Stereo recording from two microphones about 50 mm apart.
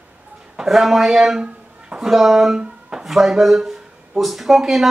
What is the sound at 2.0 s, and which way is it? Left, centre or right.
Speech, centre.